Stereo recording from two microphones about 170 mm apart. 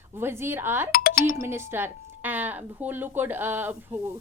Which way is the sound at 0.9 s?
60° left (ahead or behind).